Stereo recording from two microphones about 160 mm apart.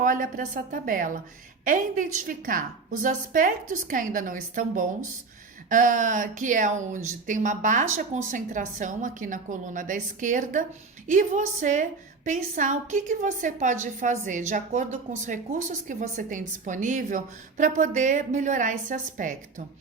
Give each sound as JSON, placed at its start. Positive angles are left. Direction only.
{"t": 0.0, "sound": "a woman's voice", "side_deg": -55}